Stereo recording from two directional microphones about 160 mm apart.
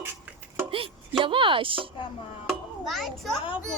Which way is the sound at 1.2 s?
30° right (ahead or behind).